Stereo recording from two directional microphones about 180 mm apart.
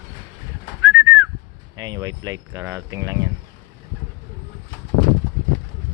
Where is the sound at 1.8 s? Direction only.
20° right (ahead or behind).